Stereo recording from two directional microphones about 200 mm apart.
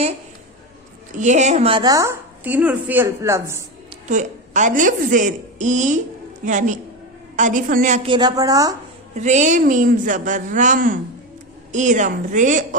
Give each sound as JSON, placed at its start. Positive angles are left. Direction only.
{"t": 1.1, "sound": "a woman's voice", "side_deg": -35}
{"t": 4.1, "sound": "a woman's voice", "side_deg": -40}
{"t": 9.1, "sound": "a woman's voice", "side_deg": -35}